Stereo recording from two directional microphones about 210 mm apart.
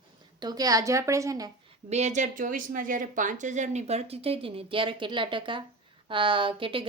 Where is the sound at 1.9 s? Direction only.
35° right (ahead or behind).